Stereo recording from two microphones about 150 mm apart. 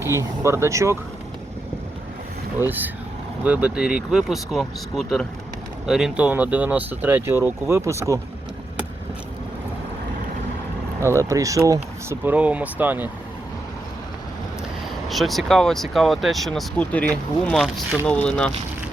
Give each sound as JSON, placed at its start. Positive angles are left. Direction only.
{"t": 0.0, "sound": "speech", "side_deg": -20}
{"t": 2.6, "sound": "speech", "side_deg": -10}
{"t": 11.0, "sound": "speech", "side_deg": -20}
{"t": 15.1, "sound": "speech", "side_deg": 0}